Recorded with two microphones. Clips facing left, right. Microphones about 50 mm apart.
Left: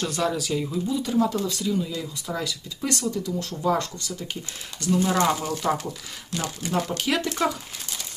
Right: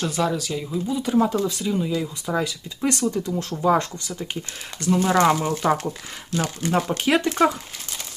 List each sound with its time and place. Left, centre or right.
0.0 s speech: centre
0.9 s speech: right